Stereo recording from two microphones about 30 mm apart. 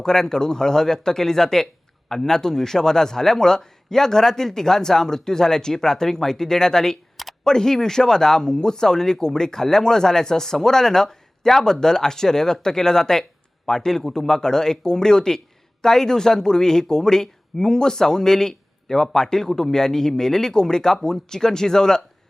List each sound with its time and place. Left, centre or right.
0.0 s a man's voice: centre